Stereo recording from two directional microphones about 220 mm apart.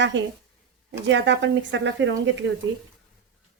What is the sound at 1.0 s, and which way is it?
A woman's voice, 55° right (ahead or behind).